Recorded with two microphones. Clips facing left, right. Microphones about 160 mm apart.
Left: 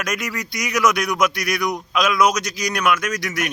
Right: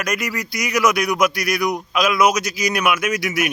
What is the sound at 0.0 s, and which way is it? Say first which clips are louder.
A man's voice: right 2 dB; centre (ahead or behind).